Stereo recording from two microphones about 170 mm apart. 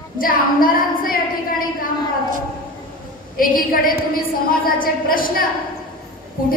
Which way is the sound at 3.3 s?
55° left (ahead or behind).